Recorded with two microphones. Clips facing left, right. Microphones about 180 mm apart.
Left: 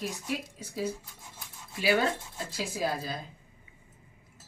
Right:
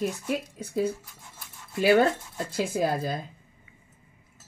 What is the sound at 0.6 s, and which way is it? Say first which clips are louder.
A woman's voice: right 6 dB; 55° right (ahead or behind).